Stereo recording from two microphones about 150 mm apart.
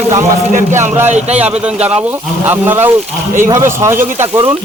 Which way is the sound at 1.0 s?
50° right (ahead or behind).